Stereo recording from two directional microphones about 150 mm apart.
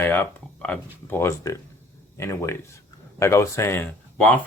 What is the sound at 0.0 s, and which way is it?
Speech, 15° left (ahead or behind).